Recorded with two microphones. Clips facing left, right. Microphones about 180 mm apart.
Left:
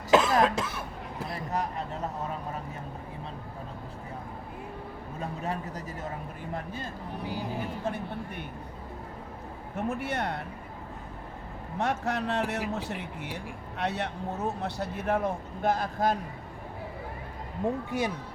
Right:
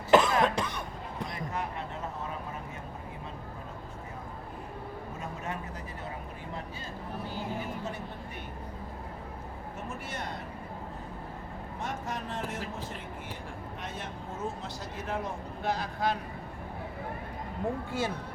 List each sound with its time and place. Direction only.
0.1 s cough: centre (ahead or behind)
0.4 s speech: 5° left (ahead or behind)
5.4 s a sound: 35° left (ahead or behind)
9.7 s a man's voice: 60° left (ahead or behind)
11.8 s speech: 70° left (ahead or behind); by 16.1 s 50° left (ahead or behind)
17.9 s speech: 15° left (ahead or behind)